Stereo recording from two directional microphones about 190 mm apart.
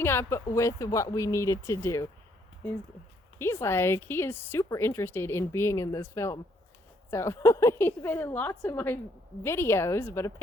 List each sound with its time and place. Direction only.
0.0 s speech: 10° left (ahead or behind)
3.3 s speech: 15° left (ahead or behind)